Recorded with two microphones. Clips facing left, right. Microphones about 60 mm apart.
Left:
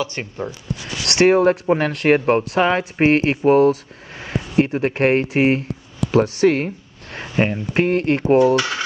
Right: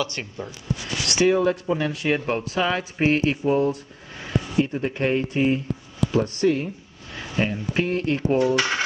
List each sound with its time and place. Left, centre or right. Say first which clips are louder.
0.0 s speech: left 3 dB; left
1.0 s speech: left 6 dB; left
2.1 s speech: left 7 dB; left
6.1 s speech: left 6 dB; left
7.2 s speech: left 5 dB; left